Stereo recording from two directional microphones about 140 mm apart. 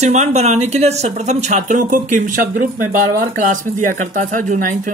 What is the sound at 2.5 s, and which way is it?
Speech, 85° right.